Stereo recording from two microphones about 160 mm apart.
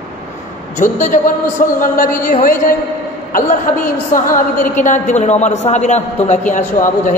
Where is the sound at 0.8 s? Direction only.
50° left (ahead or behind).